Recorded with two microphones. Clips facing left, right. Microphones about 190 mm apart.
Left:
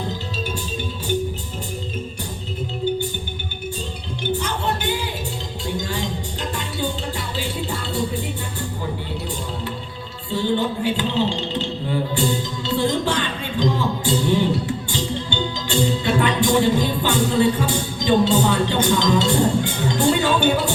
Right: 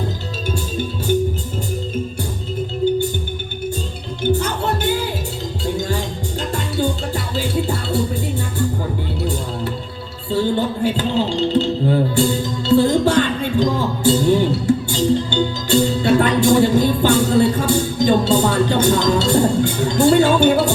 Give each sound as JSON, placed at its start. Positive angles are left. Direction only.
{"t": 4.2, "sound": "music", "side_deg": -45}
{"t": 10.3, "sound": "music", "side_deg": -40}